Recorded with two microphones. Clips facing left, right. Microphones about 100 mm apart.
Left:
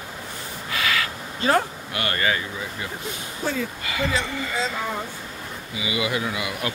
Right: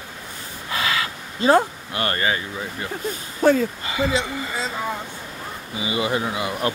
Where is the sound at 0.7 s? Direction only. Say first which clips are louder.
Right 1 dB; 25° right (ahead or behind).